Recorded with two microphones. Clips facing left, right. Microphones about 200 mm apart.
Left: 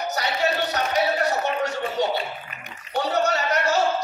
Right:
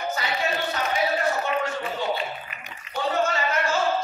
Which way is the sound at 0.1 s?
70° left (ahead or behind).